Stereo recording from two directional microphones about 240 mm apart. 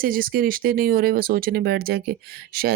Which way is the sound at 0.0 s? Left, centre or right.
Right.